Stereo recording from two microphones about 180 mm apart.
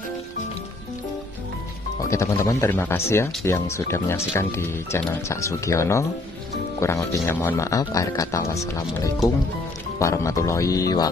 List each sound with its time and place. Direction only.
2.0 s speech: 15° left (ahead or behind)